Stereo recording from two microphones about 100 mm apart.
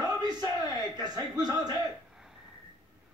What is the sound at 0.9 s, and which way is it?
Speech, 45° right (ahead or behind).